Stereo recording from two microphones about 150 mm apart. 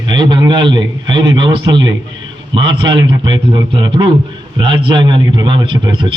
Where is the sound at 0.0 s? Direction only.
30° right (ahead or behind).